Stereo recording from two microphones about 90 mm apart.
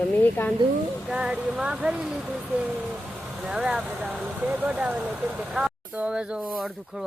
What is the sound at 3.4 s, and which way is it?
Speech, 5° right (ahead or behind).